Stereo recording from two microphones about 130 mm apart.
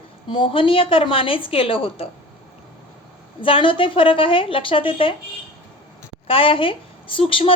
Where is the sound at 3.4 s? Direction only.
40° left (ahead or behind).